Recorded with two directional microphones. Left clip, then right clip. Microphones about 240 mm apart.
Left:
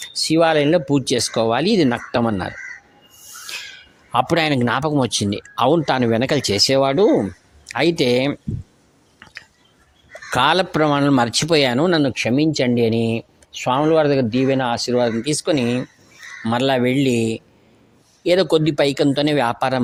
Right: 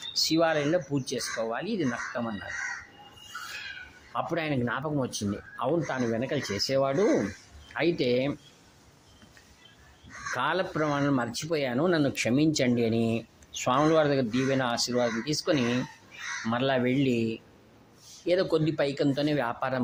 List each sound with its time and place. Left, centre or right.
0.3 s a man's voice: left
4.1 s a man's voice: left
10.3 s a man's voice: left